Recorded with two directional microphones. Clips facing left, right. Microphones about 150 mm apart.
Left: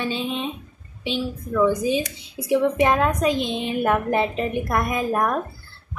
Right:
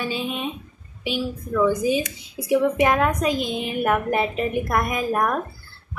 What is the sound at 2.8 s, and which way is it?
Speech, 30° left (ahead or behind).